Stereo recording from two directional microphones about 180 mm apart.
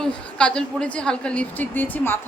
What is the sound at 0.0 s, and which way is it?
A woman's voice, 5° left (ahead or behind).